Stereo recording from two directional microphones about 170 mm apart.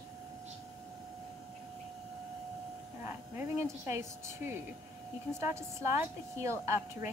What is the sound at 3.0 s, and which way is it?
A woman's voice, 15° right (ahead or behind).